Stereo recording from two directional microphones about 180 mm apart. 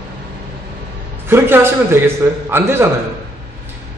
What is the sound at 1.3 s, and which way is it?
A man's voice, 15° right (ahead or behind).